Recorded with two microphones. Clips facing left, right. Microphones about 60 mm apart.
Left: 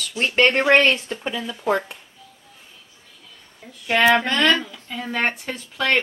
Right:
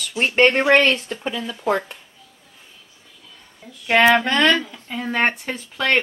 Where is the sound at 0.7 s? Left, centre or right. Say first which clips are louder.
Even; centre.